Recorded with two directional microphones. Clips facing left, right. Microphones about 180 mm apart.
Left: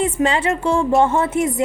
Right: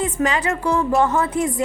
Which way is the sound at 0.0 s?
25° left (ahead or behind).